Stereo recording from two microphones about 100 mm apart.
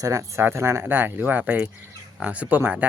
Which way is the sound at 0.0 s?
30° right (ahead or behind).